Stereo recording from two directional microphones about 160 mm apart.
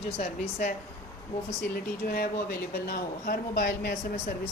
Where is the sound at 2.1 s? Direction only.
70° left (ahead or behind).